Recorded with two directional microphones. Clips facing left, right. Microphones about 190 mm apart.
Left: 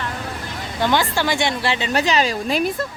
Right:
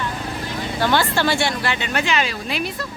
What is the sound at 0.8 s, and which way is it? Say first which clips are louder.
A woman's voice: even; 15° left (ahead or behind).